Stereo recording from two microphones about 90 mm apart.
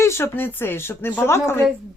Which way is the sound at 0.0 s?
30° left (ahead or behind).